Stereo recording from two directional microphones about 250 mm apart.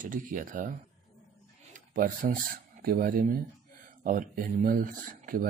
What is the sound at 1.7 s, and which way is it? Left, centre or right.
Speech, right.